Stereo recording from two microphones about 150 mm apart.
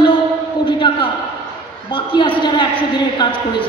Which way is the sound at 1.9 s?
35° left (ahead or behind).